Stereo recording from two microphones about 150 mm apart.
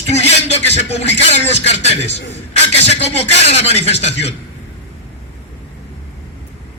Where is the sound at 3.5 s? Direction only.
45° left (ahead or behind).